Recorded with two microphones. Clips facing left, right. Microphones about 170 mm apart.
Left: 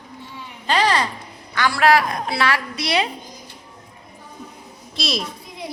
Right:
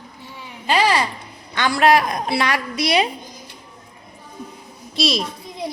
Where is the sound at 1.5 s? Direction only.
20° right (ahead or behind).